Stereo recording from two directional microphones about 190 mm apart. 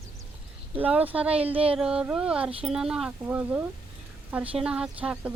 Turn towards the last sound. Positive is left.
turn(degrees=-5)  # may be behind; listen again after turning